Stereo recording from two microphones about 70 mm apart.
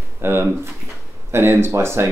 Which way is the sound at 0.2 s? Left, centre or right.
Right.